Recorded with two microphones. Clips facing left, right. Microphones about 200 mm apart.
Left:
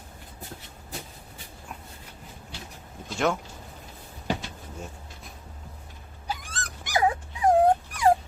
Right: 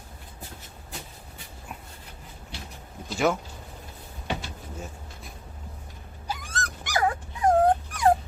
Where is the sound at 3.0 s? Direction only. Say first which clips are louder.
Right 2 dB; 5° right (ahead or behind).